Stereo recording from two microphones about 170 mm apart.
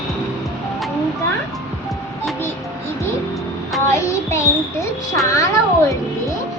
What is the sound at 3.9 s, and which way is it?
A child's voice, 15° left (ahead or behind).